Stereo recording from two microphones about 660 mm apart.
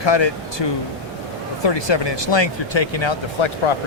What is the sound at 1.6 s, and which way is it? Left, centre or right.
Speech, left.